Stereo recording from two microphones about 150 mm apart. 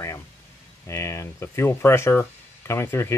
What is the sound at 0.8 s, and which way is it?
Speech, 20° left (ahead or behind).